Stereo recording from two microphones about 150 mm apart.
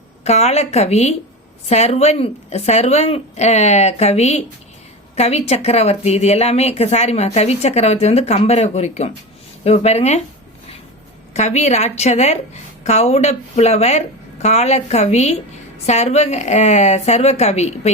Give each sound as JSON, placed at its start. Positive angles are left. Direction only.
{"t": 0.3, "sound": "speech", "side_deg": 45}
{"t": 11.3, "sound": "speech", "side_deg": 50}